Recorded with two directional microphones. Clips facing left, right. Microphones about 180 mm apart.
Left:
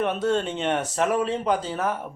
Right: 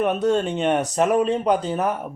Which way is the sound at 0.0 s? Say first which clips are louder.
Right 3 dB; 15° right (ahead or behind).